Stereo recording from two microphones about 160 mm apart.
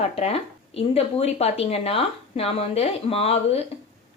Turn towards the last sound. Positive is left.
turn(degrees=40)  # may be behind; listen again after turning